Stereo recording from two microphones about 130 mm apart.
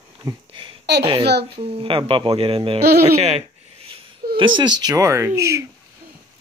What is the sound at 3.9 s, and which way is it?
Speech, 40° right (ahead or behind).